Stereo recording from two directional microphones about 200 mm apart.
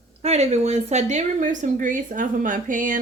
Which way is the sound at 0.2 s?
35° right (ahead or behind).